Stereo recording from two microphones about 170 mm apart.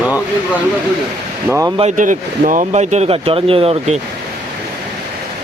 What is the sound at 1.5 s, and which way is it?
Speech, 15° right (ahead or behind).